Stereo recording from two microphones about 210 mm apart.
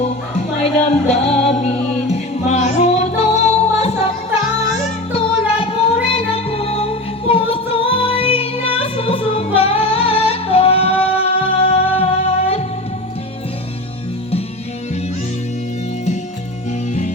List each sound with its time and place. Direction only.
0.9 s music: 30° left (ahead or behind)
5.1 s music: 25° left (ahead or behind)